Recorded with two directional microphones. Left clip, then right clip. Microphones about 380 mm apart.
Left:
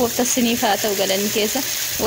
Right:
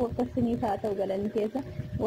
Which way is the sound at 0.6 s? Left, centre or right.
Right.